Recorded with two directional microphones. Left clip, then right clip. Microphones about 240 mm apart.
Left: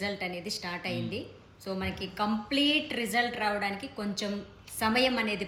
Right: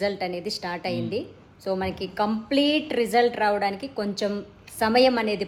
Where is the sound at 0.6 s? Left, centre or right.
Right.